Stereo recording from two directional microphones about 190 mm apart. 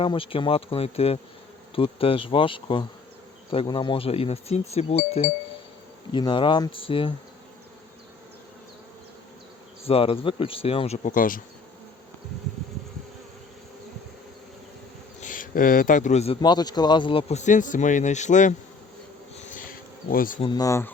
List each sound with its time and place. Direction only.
0.0 s speech: 30° left (ahead or behind)
9.8 s speech: 30° left (ahead or behind); by 11.4 s 45° left (ahead or behind)
15.2 s a man's voice: 45° left (ahead or behind)
16.4 s speech: 20° left (ahead or behind); by 18.5 s 40° left (ahead or behind)
20.1 s speech: 50° left (ahead or behind)
20.4 s speech: 20° left (ahead or behind)